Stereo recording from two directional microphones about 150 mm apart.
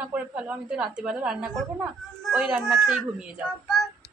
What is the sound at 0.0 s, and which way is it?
A woman's voice, 10° right (ahead or behind).